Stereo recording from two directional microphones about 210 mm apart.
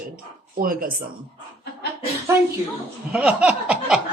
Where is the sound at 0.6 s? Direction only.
40° right (ahead or behind).